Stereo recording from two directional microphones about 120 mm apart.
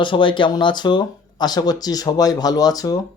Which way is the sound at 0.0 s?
45° left (ahead or behind).